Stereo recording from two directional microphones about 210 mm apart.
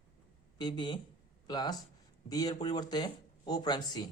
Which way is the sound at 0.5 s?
20° left (ahead or behind).